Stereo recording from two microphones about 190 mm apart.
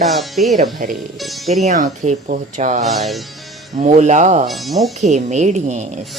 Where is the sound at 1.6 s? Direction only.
40° right (ahead or behind).